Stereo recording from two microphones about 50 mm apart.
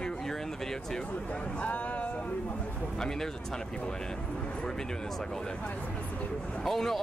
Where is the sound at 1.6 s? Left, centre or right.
Left.